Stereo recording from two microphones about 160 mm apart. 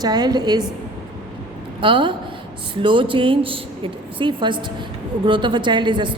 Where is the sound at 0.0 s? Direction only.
25° right (ahead or behind).